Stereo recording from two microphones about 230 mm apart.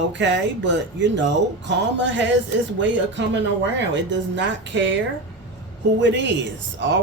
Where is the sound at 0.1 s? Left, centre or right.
Right.